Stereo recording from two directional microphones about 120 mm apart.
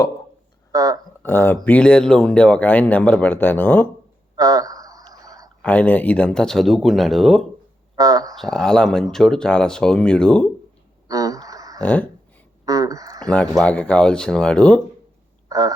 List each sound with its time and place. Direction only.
0.7 s a sound: 30° right (ahead or behind)
1.2 s speech: 15° left (ahead or behind)
4.4 s a sound: 30° right (ahead or behind)
5.6 s speech: 10° left (ahead or behind)
7.9 s speech: 30° right (ahead or behind)
8.4 s speech: 5° left (ahead or behind)
11.1 s a sound: 30° right (ahead or behind)
11.8 s speech: 15° left (ahead or behind)
12.6 s speech: 30° right (ahead or behind)
13.2 s speech: 10° left (ahead or behind)
15.4 s duck: 30° right (ahead or behind)